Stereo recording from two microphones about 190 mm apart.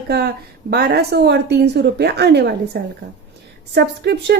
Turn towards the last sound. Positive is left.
turn(degrees=-60)  # may be behind; listen again after turning